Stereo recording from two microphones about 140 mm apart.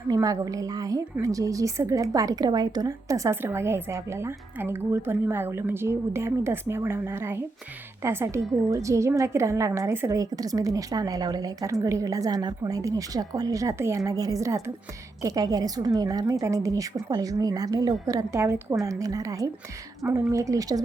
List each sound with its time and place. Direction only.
0.1 s a woman's voice: 25° right (ahead or behind)